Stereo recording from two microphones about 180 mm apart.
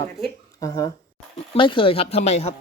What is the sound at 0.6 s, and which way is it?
Speech, 20° left (ahead or behind).